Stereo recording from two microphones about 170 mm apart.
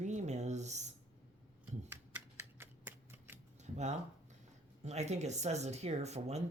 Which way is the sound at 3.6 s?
45° right (ahead or behind).